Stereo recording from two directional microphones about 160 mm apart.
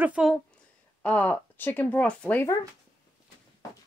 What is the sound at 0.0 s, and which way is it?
Speech, 5° right (ahead or behind).